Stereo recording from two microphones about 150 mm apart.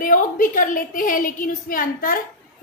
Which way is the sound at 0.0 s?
65° left (ahead or behind).